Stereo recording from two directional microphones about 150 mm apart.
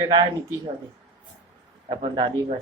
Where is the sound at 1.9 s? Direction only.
35° right (ahead or behind).